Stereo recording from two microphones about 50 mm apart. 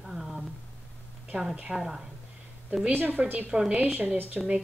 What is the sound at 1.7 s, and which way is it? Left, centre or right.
Speech, centre.